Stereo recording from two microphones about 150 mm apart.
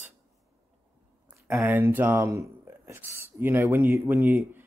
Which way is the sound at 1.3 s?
15° right (ahead or behind).